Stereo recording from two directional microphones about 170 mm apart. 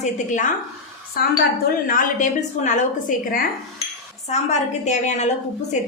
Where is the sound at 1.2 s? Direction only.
60° left (ahead or behind).